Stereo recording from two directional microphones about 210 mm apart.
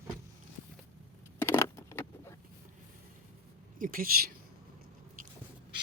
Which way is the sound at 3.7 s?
40° right (ahead or behind).